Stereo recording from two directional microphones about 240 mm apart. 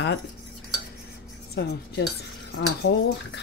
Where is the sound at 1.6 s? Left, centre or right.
Left.